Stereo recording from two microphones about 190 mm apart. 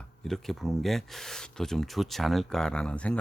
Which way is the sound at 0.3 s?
Centre (ahead or behind).